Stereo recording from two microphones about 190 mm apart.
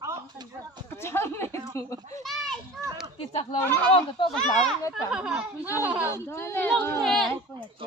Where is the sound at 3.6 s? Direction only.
10° left (ahead or behind).